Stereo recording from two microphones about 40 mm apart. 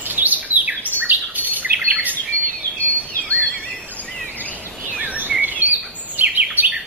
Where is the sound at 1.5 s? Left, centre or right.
Right.